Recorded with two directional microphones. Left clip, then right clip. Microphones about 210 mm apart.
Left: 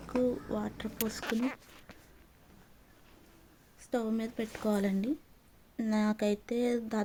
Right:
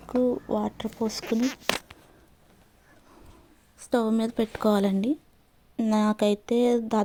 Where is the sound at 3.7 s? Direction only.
35° right (ahead or behind).